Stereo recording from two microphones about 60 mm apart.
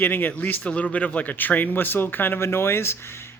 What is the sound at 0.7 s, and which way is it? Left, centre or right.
Speech, centre.